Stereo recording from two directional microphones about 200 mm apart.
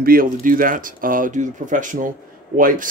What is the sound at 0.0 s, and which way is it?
Speech, 45° right (ahead or behind).